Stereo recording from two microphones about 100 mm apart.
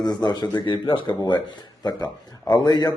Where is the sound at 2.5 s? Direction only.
40° left (ahead or behind).